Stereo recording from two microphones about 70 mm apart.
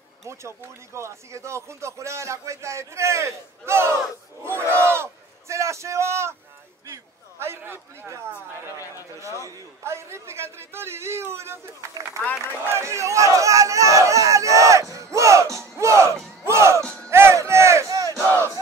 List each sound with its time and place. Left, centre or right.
0.3 s speech: right
4.5 s a sound: right
8.6 s speech: left
9.4 s a man's voice: right
12.2 s a man's voice: left
12.6 s speech: right
15.1 s music: right
16.8 s music: centre
17.1 s music: right
17.8 s battle cry: right
18.2 s battle cry: right